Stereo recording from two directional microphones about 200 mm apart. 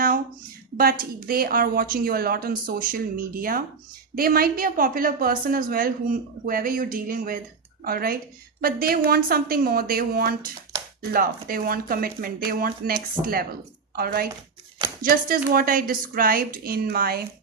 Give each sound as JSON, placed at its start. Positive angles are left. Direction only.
{"t": 0.8, "sound": "a woman's voice", "side_deg": -45}